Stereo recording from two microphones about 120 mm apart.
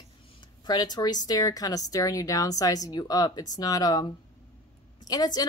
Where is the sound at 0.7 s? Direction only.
35° left (ahead or behind).